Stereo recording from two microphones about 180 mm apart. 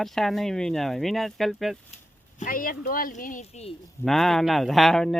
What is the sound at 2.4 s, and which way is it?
Speech, 50° left (ahead or behind).